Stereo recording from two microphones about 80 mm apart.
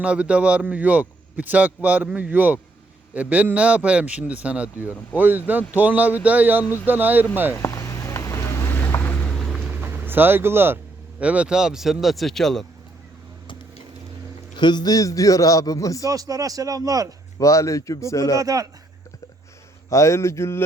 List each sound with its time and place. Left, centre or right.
0.0 s a man's voice: centre
7.5 s a sound: left
8.7 s vehicle: left
9.3 s a sound: centre
9.7 s a sound: right
11.2 s speech: centre
14.5 s a man's voice: left
16.0 s a man's voice: right
17.4 s speech: left
18.3 s a man's voice: right
19.9 s speech: left